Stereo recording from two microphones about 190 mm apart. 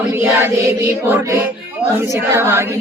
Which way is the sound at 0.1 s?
10° right (ahead or behind).